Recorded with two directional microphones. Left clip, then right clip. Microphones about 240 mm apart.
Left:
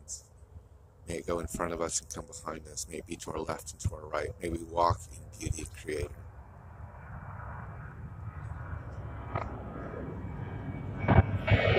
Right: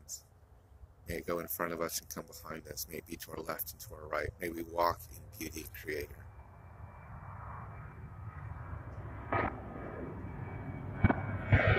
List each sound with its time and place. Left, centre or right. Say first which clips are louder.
0.1 s speech: left 3 dB; centre
7.1 s vehicle: left 3 dB; right